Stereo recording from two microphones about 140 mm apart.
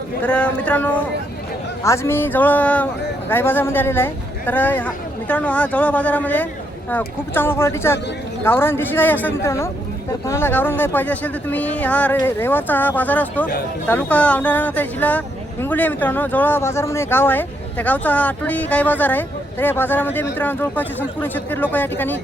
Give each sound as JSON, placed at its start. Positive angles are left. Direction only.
{"t": 0.2, "sound": "speech", "side_deg": 10}